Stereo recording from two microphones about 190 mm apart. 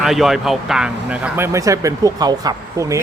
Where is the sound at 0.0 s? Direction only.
Centre (ahead or behind).